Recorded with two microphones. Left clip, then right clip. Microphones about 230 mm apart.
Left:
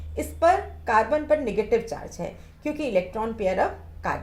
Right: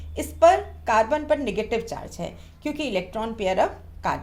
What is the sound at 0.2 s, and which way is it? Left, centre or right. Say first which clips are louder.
Speech: right 3 dB; right.